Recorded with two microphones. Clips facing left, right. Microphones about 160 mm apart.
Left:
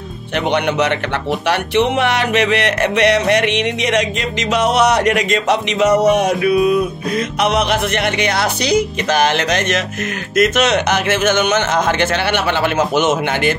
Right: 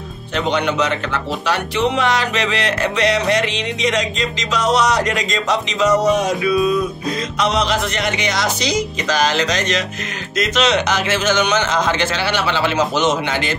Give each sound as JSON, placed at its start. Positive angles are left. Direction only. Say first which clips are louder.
{"t": 0.5, "sound": "speech", "louder": "left 2 dB", "side_deg": 65}